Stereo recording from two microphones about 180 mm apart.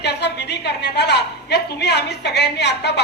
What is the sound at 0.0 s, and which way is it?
A woman's voice, 70° left (ahead or behind).